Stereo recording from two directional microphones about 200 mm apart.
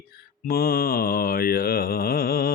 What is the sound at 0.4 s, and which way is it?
Mantra, 50° left (ahead or behind).